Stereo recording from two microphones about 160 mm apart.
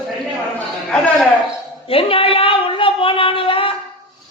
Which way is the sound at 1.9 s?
35° left (ahead or behind).